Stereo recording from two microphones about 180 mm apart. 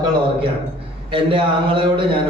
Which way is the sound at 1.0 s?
30° right (ahead or behind).